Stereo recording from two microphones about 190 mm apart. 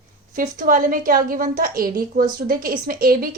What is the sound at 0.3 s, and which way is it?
A woman's voice, 45° right (ahead or behind).